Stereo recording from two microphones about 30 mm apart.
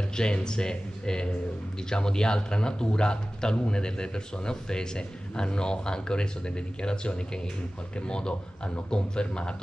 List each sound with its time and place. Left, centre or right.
0.1 s a man's voice: left